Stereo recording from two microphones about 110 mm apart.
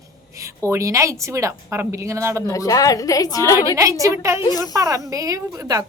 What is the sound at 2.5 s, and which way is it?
A woman's voice, 30° left (ahead or behind).